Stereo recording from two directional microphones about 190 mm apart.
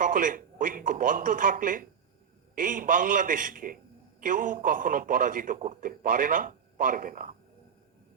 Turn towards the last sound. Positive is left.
turn(degrees=-45)  # may be behind; listen again after turning